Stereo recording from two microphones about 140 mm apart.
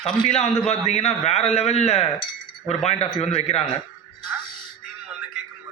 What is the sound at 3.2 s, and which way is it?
Speech, 50° left (ahead or behind).